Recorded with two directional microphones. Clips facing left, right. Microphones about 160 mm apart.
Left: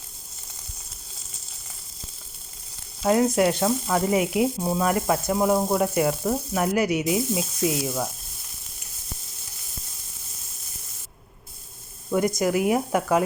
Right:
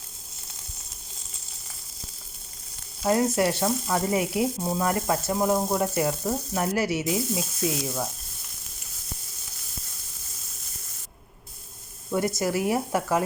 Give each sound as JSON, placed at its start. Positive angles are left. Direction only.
{"t": 3.0, "sound": "sizzle", "side_deg": 20}
{"t": 12.4, "sound": "sizzle", "side_deg": 20}